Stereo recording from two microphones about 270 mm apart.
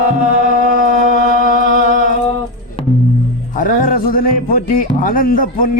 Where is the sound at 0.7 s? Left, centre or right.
Left.